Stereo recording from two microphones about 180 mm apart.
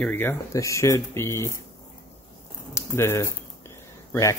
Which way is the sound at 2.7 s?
15° left (ahead or behind).